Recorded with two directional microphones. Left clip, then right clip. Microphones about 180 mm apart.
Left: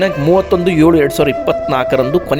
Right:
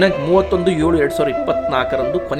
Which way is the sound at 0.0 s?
40° left (ahead or behind).